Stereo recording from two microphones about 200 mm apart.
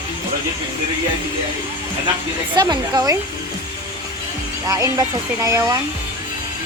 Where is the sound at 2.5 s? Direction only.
20° right (ahead or behind).